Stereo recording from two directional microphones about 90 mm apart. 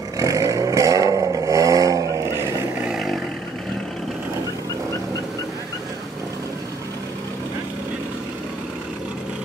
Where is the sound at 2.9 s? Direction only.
5° right (ahead or behind).